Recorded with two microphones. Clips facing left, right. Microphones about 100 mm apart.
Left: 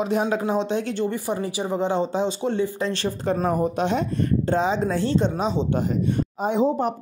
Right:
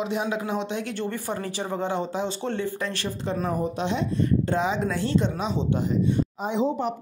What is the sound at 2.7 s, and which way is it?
Speech, 30° left (ahead or behind).